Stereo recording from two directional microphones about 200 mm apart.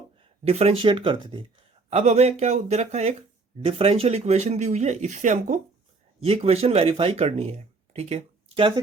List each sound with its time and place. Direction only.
0.4 s speech: 30° right (ahead or behind)